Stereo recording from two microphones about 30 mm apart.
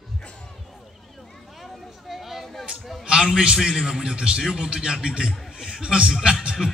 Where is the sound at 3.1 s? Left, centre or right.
Right.